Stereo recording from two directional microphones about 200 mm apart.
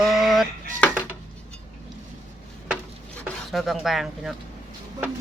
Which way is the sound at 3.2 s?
Centre (ahead or behind).